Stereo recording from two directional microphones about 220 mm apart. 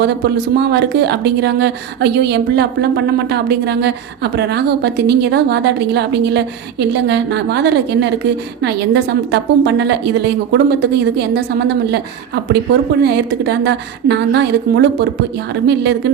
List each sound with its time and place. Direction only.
0.0 s speech: 50° right (ahead or behind)